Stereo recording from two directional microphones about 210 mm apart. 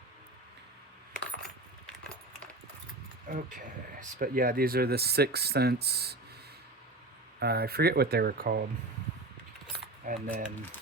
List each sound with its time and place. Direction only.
3.3 s speech: 35° right (ahead or behind)
7.3 s speech: 50° right (ahead or behind)
9.7 s keys jangling: 40° right (ahead or behind)